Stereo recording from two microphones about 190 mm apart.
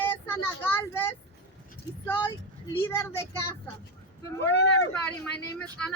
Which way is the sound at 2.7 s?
10° left (ahead or behind).